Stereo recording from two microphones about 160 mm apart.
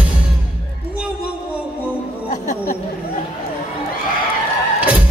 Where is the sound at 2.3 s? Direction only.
50° left (ahead or behind).